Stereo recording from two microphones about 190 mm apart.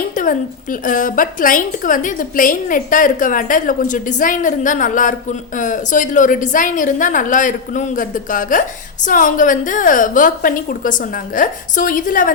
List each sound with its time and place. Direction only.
0.1 s a woman's voice: 45° left (ahead or behind)